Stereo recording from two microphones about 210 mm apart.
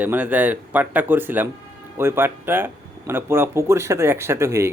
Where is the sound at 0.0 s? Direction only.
10° right (ahead or behind).